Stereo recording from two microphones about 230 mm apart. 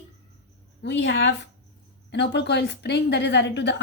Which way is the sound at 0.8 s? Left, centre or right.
Left.